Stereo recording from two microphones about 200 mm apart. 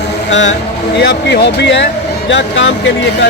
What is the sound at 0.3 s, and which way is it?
Speech, 65° left (ahead or behind).